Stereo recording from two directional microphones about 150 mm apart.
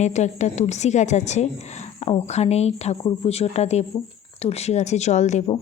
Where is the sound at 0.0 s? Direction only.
50° left (ahead or behind).